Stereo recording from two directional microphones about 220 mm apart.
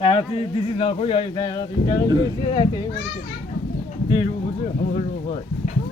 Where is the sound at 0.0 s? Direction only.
25° left (ahead or behind).